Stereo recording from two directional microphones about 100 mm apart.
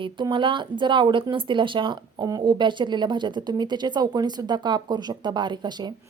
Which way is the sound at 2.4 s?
55° right (ahead or behind).